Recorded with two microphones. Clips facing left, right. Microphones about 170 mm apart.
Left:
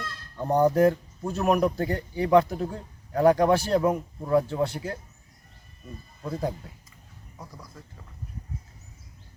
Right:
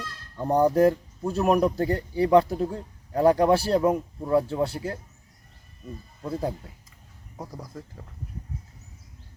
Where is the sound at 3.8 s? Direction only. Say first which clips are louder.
Right 2 dB; 10° right (ahead or behind).